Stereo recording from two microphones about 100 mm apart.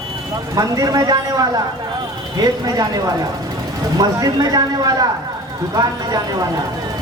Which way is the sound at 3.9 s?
40° right (ahead or behind).